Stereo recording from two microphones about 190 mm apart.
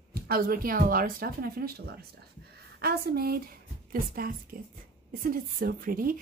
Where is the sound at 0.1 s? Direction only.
50° right (ahead or behind).